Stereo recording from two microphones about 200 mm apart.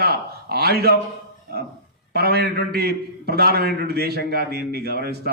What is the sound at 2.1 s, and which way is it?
A man's voice, 50° right (ahead or behind).